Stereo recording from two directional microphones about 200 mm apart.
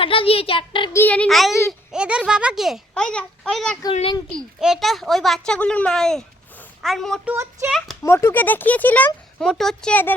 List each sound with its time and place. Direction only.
0.0 s a child's voice: 25° left (ahead or behind)
0.9 s a child's voice: 5° left (ahead or behind)
3.9 s a child's voice: 30° left (ahead or behind)
4.3 s a child's voice: centre (ahead or behind)
8.0 s a child's voice: 10° left (ahead or behind)